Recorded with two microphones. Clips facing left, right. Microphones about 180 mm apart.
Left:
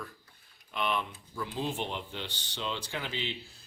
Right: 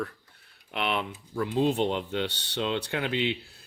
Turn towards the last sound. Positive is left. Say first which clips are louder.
# right 9 dB
turn(degrees=-65)  # may be behind; listen again after turning